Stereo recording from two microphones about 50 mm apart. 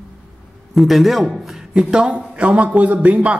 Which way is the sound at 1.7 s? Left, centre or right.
Centre.